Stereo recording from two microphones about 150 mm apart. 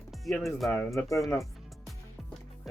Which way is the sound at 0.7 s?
15° left (ahead or behind).